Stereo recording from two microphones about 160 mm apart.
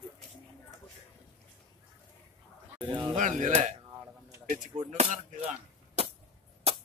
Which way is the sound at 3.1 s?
50° right (ahead or behind).